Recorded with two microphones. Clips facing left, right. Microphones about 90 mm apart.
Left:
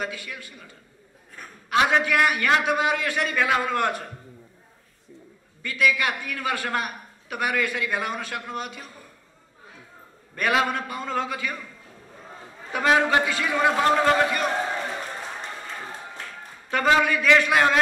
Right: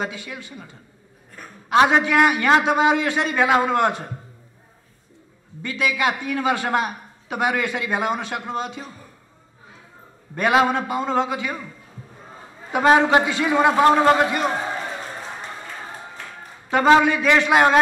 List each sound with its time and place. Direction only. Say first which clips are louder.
0.0 s a man's voice: right 3 dB; 25° right (ahead or behind)
5.6 s a man's voice: right 1 dB; 25° right (ahead or behind)
10.3 s a man's voice: right 5 dB; 20° right (ahead or behind)
12.7 s a man's voice: right 5 dB; 25° right (ahead or behind)
16.7 s a man's voice: right 5 dB; 25° right (ahead or behind)